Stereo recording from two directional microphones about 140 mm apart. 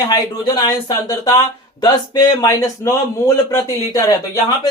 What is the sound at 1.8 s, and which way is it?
Speech, 30° left (ahead or behind).